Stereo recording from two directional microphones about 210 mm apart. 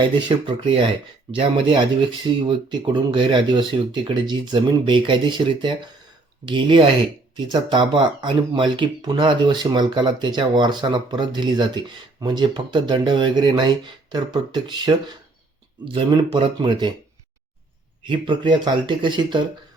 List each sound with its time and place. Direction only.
0.3 s speech: 25° right (ahead or behind)
18.0 s speech: 20° right (ahead or behind)